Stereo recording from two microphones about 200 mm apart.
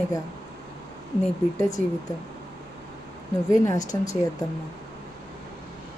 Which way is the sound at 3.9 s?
15° left (ahead or behind).